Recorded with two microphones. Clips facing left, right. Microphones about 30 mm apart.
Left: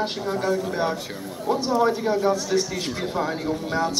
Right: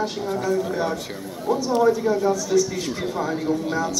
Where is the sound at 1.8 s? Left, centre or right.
Left.